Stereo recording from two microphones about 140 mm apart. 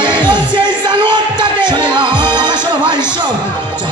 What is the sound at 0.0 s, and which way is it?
Music, 30° right (ahead or behind).